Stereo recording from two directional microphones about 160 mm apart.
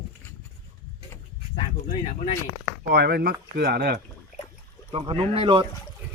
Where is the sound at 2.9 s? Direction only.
80° right.